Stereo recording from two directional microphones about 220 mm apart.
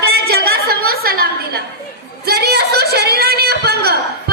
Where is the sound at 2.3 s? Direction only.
45° right (ahead or behind).